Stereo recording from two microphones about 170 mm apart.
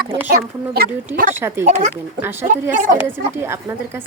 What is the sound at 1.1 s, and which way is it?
Speech, 50° right (ahead or behind).